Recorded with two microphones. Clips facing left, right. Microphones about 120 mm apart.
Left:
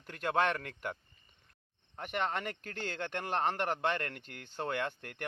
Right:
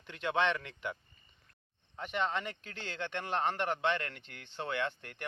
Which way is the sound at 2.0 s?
50° left (ahead or behind).